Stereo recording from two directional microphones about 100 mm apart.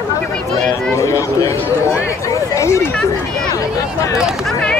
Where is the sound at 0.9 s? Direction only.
30° left (ahead or behind).